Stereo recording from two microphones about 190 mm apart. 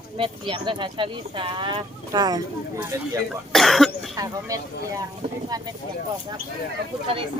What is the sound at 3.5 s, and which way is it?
Cough, centre (ahead or behind).